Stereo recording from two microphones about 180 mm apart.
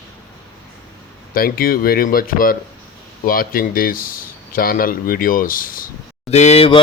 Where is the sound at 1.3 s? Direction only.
55° left (ahead or behind).